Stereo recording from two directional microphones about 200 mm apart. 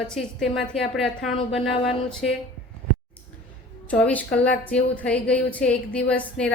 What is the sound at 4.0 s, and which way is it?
A woman's voice, 5° left (ahead or behind).